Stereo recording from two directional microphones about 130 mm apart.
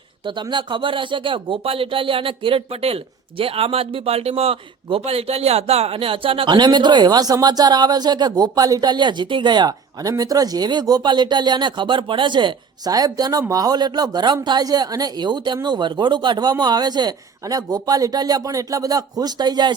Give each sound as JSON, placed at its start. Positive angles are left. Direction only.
{"t": 0.3, "sound": "speech", "side_deg": -35}